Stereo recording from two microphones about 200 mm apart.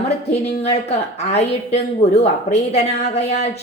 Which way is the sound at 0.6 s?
30° left (ahead or behind).